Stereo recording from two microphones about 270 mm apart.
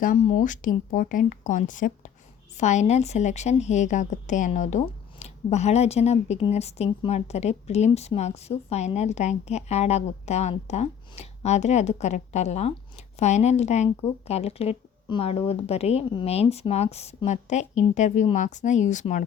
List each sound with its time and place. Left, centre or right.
0.0 s speech: left